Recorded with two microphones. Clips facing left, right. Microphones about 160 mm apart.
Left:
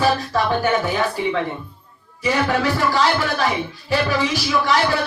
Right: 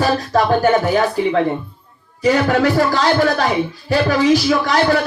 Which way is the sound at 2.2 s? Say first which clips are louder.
Right 5 dB; 45° right (ahead or behind).